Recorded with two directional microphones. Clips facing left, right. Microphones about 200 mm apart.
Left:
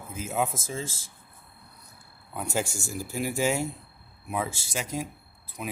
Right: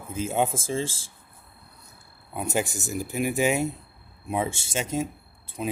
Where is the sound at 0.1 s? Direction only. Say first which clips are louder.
Right 4 dB; 30° right (ahead or behind).